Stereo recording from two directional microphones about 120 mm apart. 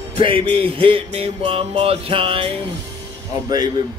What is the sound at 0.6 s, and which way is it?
Music, 50° right (ahead or behind).